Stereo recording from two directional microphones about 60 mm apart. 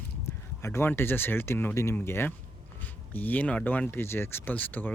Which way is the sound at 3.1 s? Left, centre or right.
Left.